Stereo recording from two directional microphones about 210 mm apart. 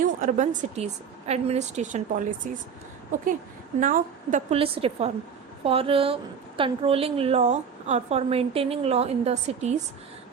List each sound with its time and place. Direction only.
0.0 s a woman's voice: 35° right (ahead or behind)
3.8 s a woman's voice: 35° right (ahead or behind)